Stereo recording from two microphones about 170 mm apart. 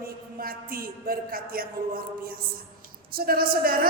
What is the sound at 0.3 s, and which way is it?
A woman's voice, 60° right (ahead or behind).